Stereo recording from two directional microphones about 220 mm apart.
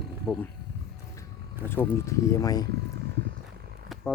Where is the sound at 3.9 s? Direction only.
Centre (ahead or behind).